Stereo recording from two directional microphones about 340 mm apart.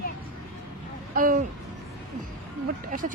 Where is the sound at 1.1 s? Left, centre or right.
Right.